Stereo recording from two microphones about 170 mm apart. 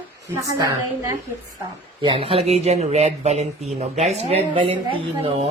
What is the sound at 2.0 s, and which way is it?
Speech, 30° right (ahead or behind).